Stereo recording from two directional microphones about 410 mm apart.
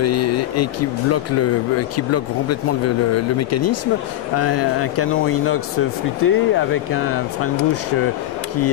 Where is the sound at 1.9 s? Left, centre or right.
Left.